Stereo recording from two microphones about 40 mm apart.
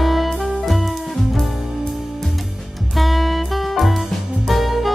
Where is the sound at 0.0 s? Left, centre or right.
Centre.